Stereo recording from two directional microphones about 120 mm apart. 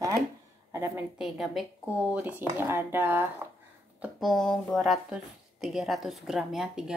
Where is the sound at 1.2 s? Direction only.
Centre (ahead or behind).